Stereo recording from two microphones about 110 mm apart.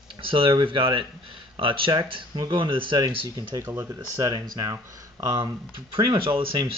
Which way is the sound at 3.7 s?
30° right (ahead or behind).